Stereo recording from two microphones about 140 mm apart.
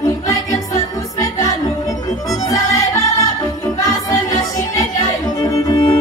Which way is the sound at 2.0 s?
25° left (ahead or behind).